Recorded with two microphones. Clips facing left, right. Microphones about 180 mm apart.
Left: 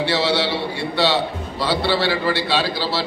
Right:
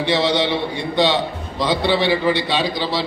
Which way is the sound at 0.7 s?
15° right (ahead or behind).